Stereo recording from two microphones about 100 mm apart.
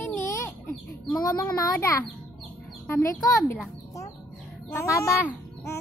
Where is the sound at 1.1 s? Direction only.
35° left (ahead or behind).